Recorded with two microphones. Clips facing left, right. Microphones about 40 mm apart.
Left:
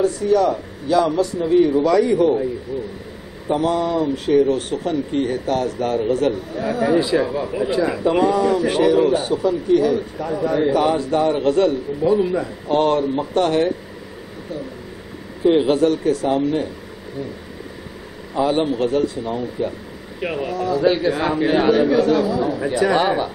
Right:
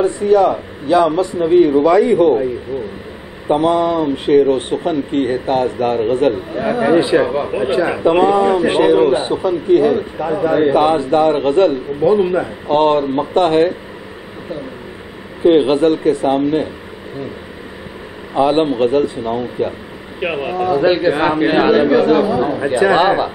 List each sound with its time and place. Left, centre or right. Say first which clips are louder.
0.0 s a man's voice: right 4 dB; right
15.4 s a man's voice: right 4 dB; right
18.3 s a man's voice: right 5 dB; right